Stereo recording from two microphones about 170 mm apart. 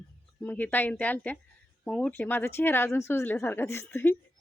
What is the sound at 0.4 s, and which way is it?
A woman's voice, 10° left (ahead or behind).